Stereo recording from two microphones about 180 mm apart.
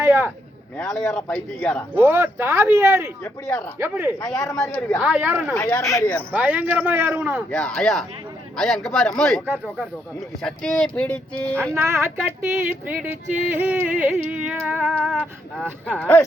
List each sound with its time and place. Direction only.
0.0 s speech: 10° right (ahead or behind)
0.9 s a man's voice: 10° left (ahead or behind)
2.0 s speech: 10° right (ahead or behind)
4.4 s a man's voice: 15° left (ahead or behind)
4.9 s speech: 10° right (ahead or behind)
5.5 s a man's voice: 15° left (ahead or behind)
6.3 s speech: 10° right (ahead or behind)
7.5 s speech: 5° left (ahead or behind)
11.7 s speech: 15° right (ahead or behind); by 16.2 s 10° left (ahead or behind)